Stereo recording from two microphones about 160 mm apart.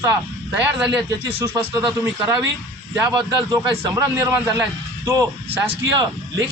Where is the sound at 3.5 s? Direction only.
20° right (ahead or behind).